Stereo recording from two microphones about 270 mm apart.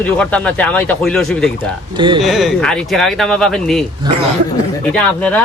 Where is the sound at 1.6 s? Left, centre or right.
Centre.